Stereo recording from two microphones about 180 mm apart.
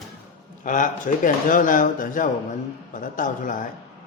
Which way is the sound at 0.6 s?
45° left (ahead or behind).